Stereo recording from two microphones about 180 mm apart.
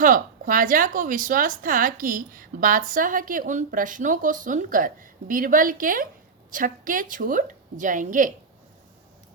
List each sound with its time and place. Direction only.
0.0 s speech: 50° right (ahead or behind)